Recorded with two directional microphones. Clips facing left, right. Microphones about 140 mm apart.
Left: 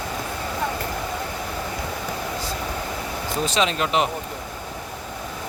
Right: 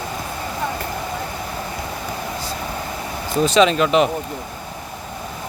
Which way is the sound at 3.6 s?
60° right (ahead or behind).